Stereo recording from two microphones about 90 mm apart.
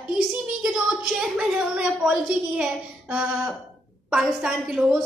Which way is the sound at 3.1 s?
5° right (ahead or behind).